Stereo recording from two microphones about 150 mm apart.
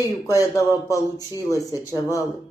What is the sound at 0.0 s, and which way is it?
Speech, 20° left (ahead or behind).